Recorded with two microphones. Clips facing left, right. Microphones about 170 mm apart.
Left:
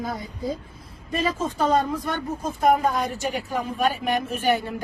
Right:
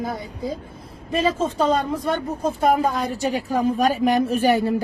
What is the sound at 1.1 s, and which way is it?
A woman's voice, 30° right (ahead or behind).